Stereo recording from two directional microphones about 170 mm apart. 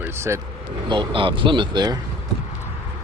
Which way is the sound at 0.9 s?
30° right (ahead or behind).